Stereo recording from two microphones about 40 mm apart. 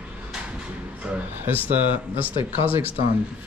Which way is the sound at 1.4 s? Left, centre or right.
Right.